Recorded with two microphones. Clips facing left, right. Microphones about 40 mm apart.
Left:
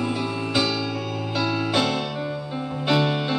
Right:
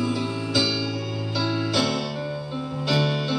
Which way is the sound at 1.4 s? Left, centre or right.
Left.